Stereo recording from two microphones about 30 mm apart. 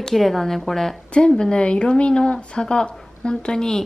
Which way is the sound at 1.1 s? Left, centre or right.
Left.